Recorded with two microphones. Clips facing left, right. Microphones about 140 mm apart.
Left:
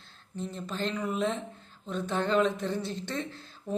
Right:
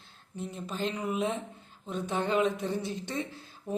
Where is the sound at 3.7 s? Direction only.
10° right (ahead or behind).